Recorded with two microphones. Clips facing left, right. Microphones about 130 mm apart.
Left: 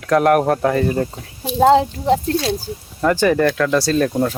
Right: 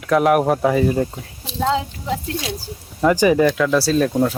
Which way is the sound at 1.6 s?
45° left (ahead or behind).